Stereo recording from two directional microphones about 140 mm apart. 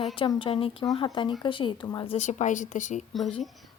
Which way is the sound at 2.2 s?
60° left (ahead or behind).